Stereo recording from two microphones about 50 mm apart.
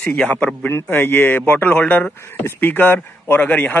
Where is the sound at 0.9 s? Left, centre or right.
Left.